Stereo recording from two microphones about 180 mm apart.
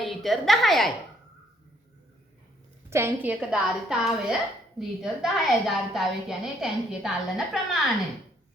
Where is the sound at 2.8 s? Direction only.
15° right (ahead or behind).